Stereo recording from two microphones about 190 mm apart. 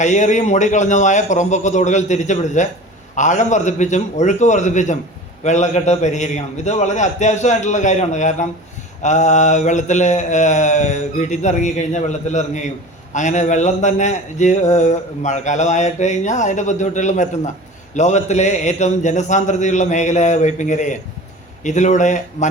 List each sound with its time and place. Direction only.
0.0 s a man's voice: 40° left (ahead or behind)